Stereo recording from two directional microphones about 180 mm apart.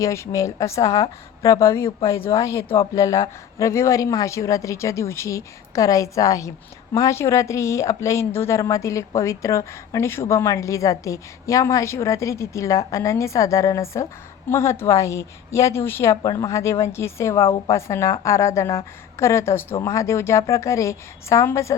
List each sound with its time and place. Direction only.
0.0 s a woman's voice: 15° left (ahead or behind)